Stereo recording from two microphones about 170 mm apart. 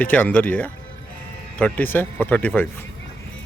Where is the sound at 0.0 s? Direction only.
10° left (ahead or behind).